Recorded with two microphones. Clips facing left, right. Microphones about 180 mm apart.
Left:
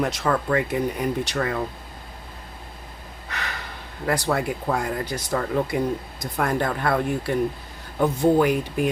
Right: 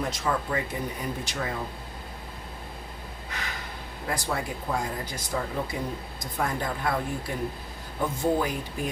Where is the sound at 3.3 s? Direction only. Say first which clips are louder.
Left 4 dB; 70° left (ahead or behind).